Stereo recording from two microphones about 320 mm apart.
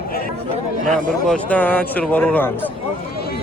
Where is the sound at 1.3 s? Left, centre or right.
Centre.